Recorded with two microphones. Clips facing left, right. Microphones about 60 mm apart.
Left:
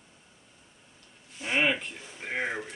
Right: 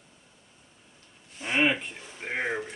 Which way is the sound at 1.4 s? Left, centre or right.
Centre.